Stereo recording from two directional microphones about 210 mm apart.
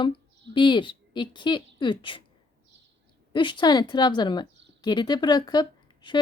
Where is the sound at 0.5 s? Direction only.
20° left (ahead or behind).